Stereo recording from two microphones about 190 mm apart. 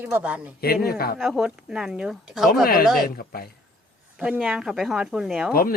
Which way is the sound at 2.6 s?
50° left (ahead or behind).